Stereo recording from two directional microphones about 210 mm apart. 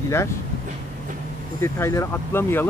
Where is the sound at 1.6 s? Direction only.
15° left (ahead or behind).